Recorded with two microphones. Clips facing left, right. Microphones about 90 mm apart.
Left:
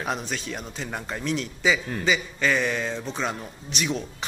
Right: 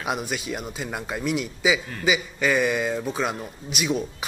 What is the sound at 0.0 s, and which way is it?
A man's voice, 10° right (ahead or behind).